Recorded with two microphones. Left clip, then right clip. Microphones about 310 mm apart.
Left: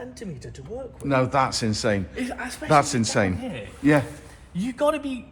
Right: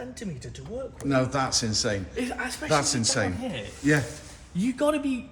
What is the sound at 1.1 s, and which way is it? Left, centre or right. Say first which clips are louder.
Speech: left 4 dB; centre.